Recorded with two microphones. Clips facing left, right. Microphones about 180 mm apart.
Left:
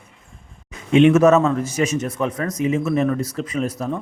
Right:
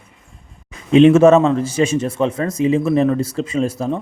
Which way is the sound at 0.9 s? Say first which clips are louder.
Right 4 dB; 35° right (ahead or behind).